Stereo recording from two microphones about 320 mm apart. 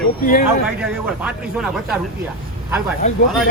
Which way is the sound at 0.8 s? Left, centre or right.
Centre.